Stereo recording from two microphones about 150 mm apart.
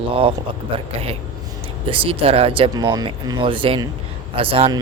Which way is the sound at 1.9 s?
35° right (ahead or behind).